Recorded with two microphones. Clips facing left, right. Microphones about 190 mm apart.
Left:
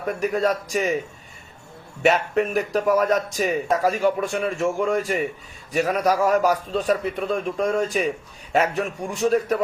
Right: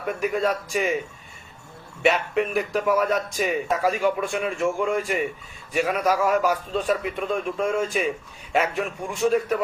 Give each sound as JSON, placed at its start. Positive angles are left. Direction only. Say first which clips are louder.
{"t": 0.0, "sound": "speech", "louder": "left 2 dB", "side_deg": 40}
{"t": 2.0, "sound": "speech", "louder": "left 2 dB", "side_deg": 40}